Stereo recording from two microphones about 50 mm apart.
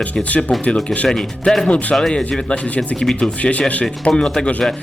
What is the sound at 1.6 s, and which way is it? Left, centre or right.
Speech, left.